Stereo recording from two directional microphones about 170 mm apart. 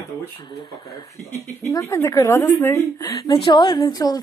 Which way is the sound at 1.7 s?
15° left (ahead or behind).